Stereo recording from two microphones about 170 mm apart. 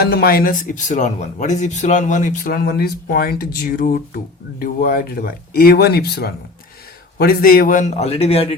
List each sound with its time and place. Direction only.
0.0 s a man's voice: 65° left (ahead or behind); by 8.5 s 35° left (ahead or behind)